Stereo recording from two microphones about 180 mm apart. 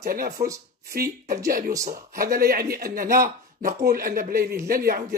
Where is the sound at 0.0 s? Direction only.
55° right (ahead or behind).